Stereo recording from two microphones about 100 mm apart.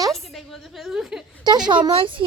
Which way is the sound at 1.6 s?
45° right (ahead or behind).